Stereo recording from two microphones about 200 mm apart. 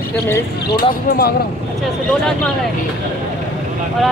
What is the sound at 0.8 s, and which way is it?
Speech, 50° left (ahead or behind).